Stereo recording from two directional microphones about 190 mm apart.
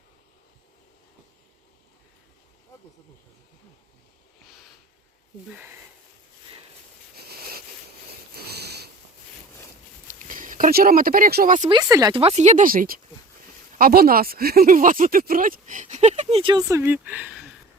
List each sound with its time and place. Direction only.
7.3 s a sound: 55° right (ahead or behind)
8.4 s sniff: 55° right (ahead or behind)
10.1 s speech: 45° right (ahead or behind)
11.7 s speech: 20° right (ahead or behind)
12.2 s speech: 35° right (ahead or behind); by 17.5 s 5° right (ahead or behind)